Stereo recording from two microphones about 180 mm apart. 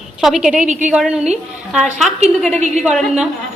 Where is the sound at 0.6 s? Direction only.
45° right (ahead or behind).